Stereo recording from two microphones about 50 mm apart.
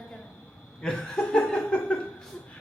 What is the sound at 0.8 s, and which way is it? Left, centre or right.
Chuckle, centre.